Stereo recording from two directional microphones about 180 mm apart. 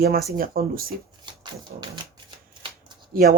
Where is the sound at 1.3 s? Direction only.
25° right (ahead or behind).